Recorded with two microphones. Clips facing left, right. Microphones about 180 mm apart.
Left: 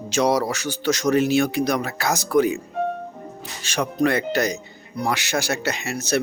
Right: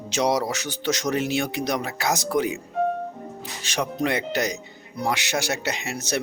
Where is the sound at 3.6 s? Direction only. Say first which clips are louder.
Left 4 dB; 20° right (ahead or behind).